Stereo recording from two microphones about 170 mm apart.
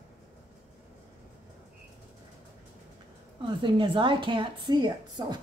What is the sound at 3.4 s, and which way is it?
A woman's voice, 30° right (ahead or behind).